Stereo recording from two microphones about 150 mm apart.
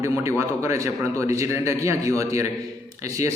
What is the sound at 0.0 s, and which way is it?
A man's voice, 20° right (ahead or behind).